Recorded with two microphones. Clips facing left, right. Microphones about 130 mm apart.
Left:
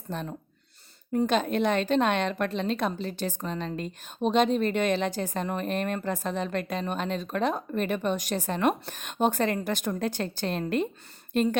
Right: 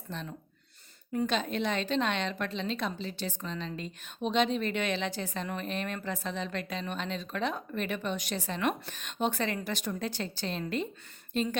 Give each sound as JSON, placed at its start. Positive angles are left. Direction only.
{"t": 0.1, "sound": "a woman's voice", "side_deg": 50}